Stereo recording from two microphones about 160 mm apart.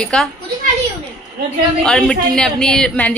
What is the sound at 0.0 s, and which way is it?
Speech, 5° left (ahead or behind).